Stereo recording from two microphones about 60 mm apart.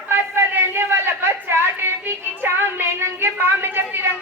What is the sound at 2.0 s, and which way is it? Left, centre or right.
Music, right.